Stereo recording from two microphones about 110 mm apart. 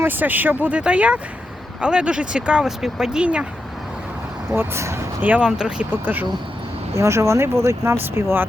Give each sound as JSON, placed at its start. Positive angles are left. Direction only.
{"t": 0.0, "sound": "speech", "side_deg": -15}
{"t": 4.5, "sound": "speech", "side_deg": -25}
{"t": 5.2, "sound": "speech", "side_deg": -15}
{"t": 6.9, "sound": "speech", "side_deg": -25}